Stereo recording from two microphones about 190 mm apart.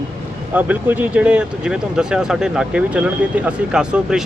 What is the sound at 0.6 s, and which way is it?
Speech, 10° right (ahead or behind).